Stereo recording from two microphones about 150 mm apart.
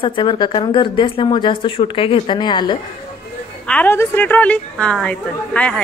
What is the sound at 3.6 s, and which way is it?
A woman's voice, 10° left (ahead or behind).